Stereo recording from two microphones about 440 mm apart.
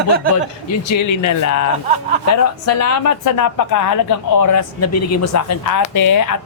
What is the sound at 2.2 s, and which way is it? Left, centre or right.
Speech, left.